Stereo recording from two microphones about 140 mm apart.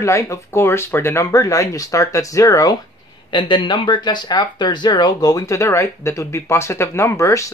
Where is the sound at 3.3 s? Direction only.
35° left (ahead or behind).